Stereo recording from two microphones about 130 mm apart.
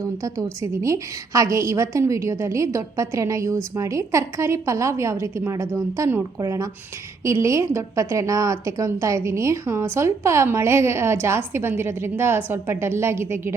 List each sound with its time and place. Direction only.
0.0 s a woman's voice: 25° right (ahead or behind)